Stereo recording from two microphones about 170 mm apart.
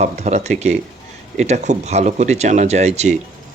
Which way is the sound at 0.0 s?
40° right (ahead or behind).